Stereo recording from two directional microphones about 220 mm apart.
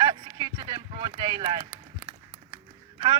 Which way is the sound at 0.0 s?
20° right (ahead or behind).